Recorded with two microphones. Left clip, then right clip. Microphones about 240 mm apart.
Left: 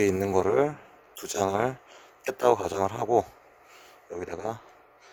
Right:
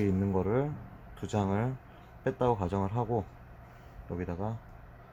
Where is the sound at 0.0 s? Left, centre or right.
Left.